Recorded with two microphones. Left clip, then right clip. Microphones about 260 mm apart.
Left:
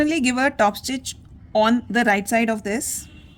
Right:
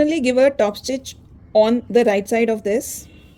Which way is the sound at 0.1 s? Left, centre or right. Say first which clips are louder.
Right 5 dB; left.